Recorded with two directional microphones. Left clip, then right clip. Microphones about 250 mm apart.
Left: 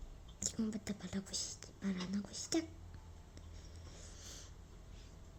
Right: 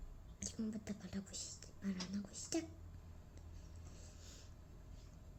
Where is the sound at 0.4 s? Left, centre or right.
Left.